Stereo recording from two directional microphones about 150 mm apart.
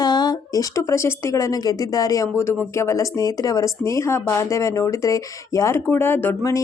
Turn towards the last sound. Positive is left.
turn(degrees=15)  # may be behind; listen again after turning